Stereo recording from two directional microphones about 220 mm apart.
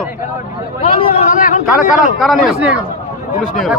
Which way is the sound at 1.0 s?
35° left (ahead or behind).